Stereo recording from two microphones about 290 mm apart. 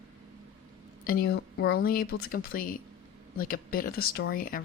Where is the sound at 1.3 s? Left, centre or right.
Left.